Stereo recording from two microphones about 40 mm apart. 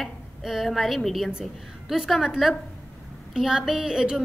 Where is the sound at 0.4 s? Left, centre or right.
Centre.